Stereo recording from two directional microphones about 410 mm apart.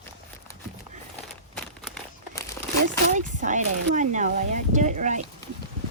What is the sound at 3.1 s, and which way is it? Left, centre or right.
Speech, centre.